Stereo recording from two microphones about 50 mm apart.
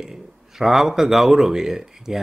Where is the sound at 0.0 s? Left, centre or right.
Centre.